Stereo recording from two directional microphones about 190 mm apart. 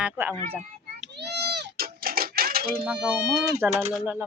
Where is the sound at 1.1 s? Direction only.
60° right (ahead or behind).